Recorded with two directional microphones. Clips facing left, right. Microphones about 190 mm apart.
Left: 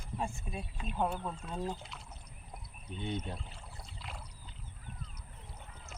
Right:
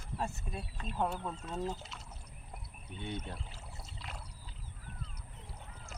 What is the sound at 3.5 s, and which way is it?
Pour, centre (ahead or behind).